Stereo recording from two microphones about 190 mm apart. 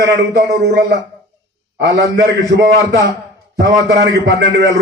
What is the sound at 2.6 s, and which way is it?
A man's voice, 55° right (ahead or behind).